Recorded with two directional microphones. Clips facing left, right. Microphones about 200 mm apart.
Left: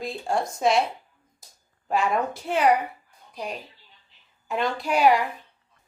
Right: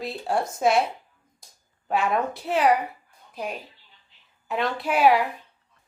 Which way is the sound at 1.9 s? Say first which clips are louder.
Even; centre (ahead or behind).